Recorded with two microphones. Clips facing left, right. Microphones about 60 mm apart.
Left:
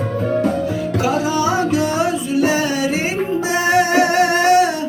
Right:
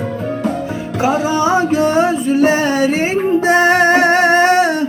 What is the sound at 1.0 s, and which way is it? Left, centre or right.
Music, right.